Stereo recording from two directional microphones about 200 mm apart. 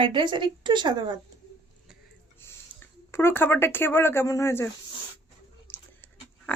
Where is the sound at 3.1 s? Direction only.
10° left (ahead or behind).